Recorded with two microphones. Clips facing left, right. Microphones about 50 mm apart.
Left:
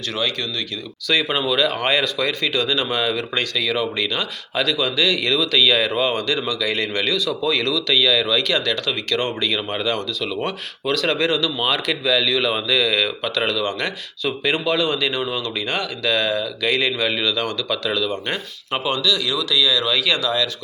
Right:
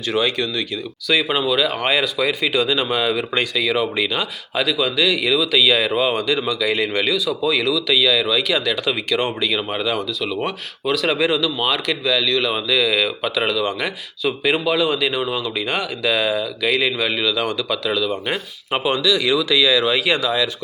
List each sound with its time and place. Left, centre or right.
0.1 s speech: centre
1.0 s speech: centre